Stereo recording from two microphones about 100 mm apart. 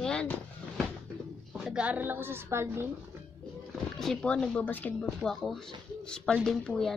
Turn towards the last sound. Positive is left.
turn(degrees=5)  # may be behind; listen again after turning